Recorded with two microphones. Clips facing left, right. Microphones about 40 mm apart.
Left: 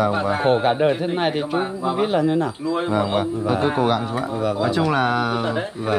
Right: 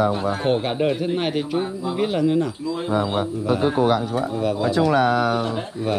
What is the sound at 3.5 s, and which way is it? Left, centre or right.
A man's voice, centre.